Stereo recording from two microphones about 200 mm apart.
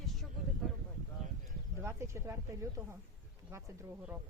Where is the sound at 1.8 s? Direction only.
15° right (ahead or behind).